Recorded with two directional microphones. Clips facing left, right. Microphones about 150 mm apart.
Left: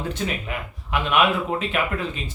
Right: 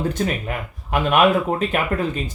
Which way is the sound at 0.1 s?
45° right (ahead or behind).